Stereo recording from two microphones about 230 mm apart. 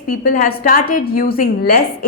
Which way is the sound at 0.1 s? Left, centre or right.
Left.